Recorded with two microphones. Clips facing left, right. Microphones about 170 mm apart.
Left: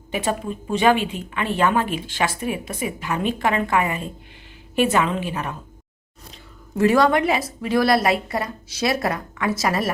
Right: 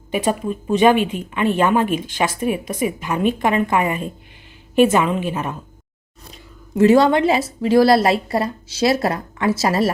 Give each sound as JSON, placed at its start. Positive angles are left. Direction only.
{"t": 0.1, "sound": "a woman's voice", "side_deg": -15}
{"t": 6.7, "sound": "a woman's voice", "side_deg": -25}